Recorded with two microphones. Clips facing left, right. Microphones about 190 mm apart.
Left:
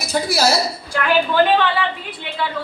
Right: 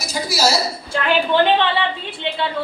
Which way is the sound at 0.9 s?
25° right (ahead or behind).